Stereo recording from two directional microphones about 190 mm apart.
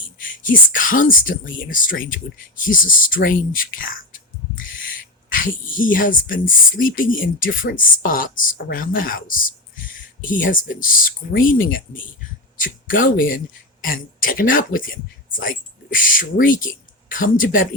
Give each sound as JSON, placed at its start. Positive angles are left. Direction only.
{"t": 0.3, "sound": "speech", "side_deg": 45}
{"t": 12.5, "sound": "a sound", "side_deg": 45}
{"t": 13.1, "sound": "speech", "side_deg": 45}